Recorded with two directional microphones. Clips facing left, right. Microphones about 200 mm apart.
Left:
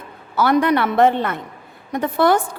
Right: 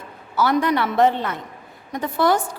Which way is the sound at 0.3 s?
60° left (ahead or behind).